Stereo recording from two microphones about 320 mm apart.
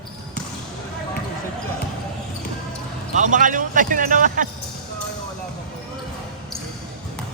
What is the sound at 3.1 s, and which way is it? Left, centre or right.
Speech, right.